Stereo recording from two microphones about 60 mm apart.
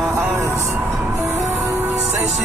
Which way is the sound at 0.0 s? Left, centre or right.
Right.